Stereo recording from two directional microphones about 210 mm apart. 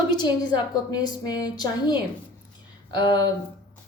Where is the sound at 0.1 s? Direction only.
20° left (ahead or behind).